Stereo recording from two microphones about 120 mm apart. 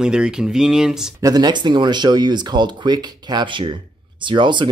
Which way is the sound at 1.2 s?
35° right (ahead or behind).